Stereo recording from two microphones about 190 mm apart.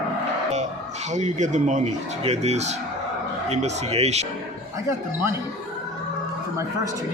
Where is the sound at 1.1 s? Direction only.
40° right (ahead or behind).